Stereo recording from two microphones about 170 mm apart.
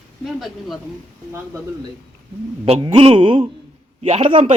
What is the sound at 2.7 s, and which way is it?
Speech, 30° right (ahead or behind).